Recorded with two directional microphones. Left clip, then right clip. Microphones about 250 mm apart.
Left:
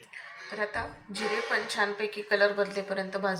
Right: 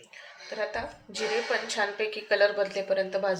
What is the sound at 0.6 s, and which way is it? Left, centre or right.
A woman's voice, right.